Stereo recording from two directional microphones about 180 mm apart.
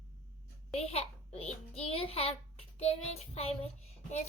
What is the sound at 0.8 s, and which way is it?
A child's voice, 35° left (ahead or behind).